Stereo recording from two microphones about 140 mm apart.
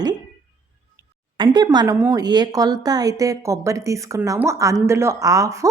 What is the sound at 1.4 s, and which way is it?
A woman's voice, 30° right (ahead or behind).